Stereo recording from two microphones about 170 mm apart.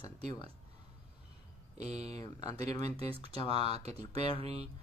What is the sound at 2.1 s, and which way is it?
Speech, 20° left (ahead or behind).